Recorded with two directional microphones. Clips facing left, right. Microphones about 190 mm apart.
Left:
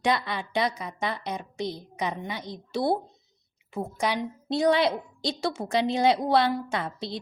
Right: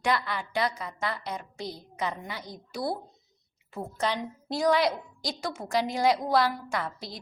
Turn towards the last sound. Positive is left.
turn(degrees=25)  # may be behind; listen again after turning